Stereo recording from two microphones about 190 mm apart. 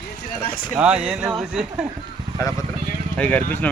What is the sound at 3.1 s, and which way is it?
Speech, 10° left (ahead or behind).